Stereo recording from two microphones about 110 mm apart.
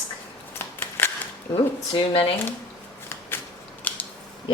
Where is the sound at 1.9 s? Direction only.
55° left (ahead or behind).